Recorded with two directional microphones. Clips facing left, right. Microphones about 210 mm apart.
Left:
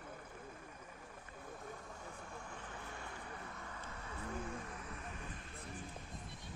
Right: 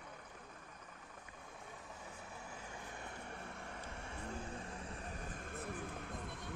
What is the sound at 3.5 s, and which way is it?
Vehicle, 30° right (ahead or behind).